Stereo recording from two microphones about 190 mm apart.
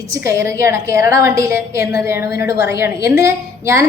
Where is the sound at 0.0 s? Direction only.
15° right (ahead or behind).